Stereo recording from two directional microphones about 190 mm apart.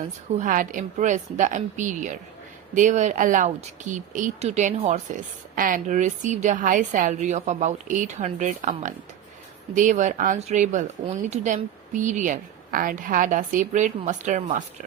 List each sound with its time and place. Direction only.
0.3 s speech: 45° right (ahead or behind)